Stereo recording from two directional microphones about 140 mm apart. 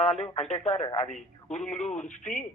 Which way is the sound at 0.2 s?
50° left (ahead or behind).